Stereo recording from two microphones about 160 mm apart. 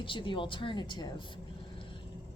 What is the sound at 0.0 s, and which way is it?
A woman's voice, 30° left (ahead or behind).